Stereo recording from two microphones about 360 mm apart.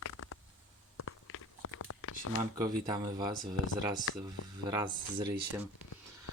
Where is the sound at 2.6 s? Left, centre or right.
Centre.